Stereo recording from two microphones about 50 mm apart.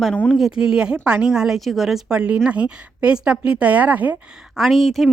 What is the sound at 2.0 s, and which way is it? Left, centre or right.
A woman's voice, right.